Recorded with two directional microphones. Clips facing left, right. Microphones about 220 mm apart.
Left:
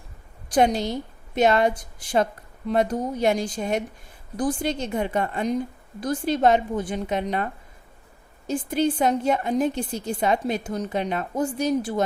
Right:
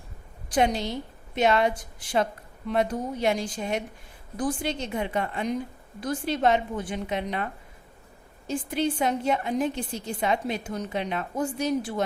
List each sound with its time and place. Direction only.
0.5 s a woman's voice: 40° left (ahead or behind)
8.4 s a woman's voice: 40° left (ahead or behind)